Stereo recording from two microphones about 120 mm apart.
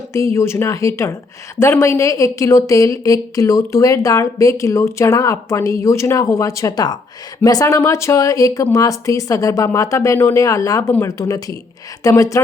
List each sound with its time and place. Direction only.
0.1 s speech: 25° left (ahead or behind)